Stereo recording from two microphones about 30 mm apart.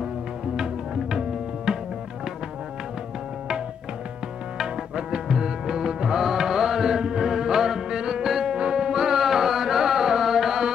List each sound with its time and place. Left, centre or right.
1.7 s tabla: right
4.9 s music: right